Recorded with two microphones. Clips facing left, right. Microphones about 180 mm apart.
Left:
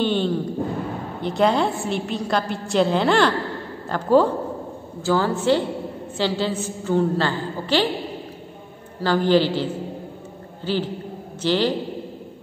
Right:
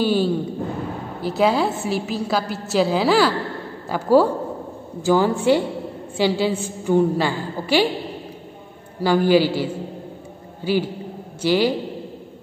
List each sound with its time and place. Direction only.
0.0 s a woman's voice: 5° right (ahead or behind)
9.0 s a woman's voice: 10° right (ahead or behind)